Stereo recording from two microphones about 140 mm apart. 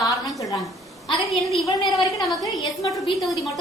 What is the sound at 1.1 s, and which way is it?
Speech, centre (ahead or behind).